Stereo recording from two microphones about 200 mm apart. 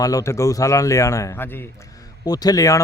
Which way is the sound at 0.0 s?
15° left (ahead or behind).